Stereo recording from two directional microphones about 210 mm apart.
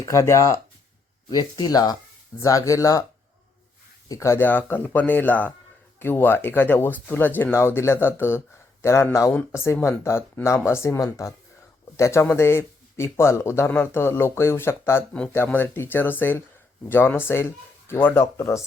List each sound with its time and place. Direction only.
0.0 s speech: 15° left (ahead or behind)
4.1 s speech: 15° left (ahead or behind)